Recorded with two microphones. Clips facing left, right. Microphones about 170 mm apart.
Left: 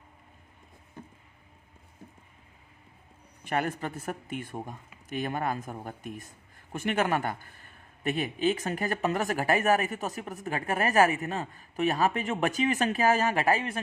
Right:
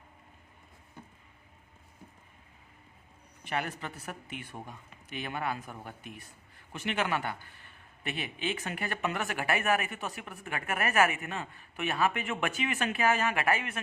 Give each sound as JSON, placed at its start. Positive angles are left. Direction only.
{"t": 3.4, "sound": "a man's voice", "side_deg": 45}